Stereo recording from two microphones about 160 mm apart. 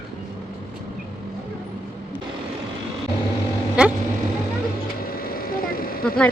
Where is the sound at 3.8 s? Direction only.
5° right (ahead or behind).